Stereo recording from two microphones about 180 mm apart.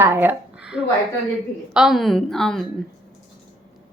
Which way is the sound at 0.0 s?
10° right (ahead or behind).